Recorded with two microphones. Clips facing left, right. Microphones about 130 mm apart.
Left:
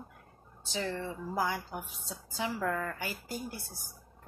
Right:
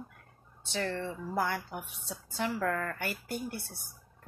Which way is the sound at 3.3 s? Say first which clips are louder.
Right 3 dB; 60° right (ahead or behind).